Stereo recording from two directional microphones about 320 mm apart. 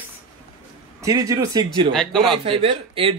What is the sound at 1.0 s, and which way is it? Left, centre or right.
Speech, centre.